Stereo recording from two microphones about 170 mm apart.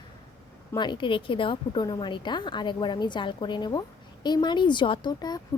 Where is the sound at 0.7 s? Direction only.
25° left (ahead or behind).